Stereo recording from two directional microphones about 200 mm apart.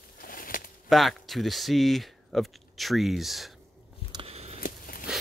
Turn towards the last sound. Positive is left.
turn(degrees=45)  # may be behind; listen again after turning